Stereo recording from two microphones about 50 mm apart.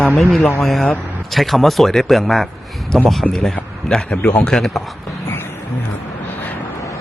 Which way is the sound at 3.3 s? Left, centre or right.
Centre.